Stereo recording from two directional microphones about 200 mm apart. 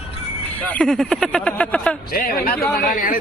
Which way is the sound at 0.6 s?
5° left (ahead or behind).